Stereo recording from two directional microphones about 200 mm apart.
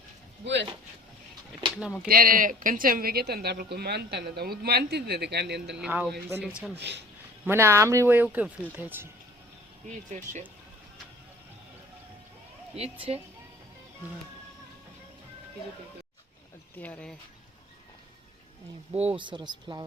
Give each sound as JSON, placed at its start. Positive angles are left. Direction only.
{"t": 1.6, "sound": "a sound", "side_deg": -20}
{"t": 2.0, "sound": "speech", "side_deg": -45}
{"t": 5.7, "sound": "speech", "side_deg": -5}
{"t": 6.7, "sound": "speech", "side_deg": -60}
{"t": 7.4, "sound": "speech", "side_deg": -10}
{"t": 10.1, "sound": "speech", "side_deg": -35}
{"t": 12.7, "sound": "speech", "side_deg": -30}
{"t": 16.7, "sound": "speech", "side_deg": 10}
{"t": 18.9, "sound": "speech", "side_deg": -30}